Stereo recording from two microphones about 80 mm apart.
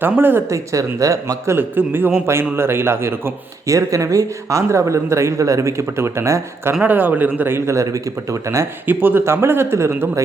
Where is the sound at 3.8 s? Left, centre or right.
Right.